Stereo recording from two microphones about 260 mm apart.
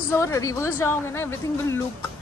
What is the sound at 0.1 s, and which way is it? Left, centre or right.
Speech, centre.